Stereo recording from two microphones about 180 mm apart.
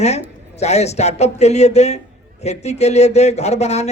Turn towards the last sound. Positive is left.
turn(degrees=35)  # may be behind; listen again after turning